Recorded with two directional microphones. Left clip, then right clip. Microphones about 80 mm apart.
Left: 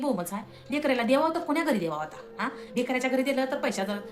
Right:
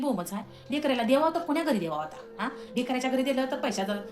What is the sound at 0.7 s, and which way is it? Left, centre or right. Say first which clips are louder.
A woman's voice: left 1 dB; left.